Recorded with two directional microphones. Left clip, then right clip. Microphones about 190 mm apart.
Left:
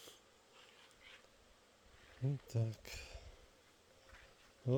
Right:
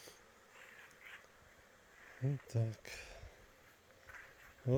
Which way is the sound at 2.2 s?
Centre (ahead or behind).